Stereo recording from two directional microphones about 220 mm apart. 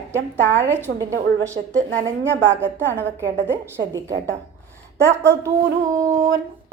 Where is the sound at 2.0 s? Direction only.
10° right (ahead or behind).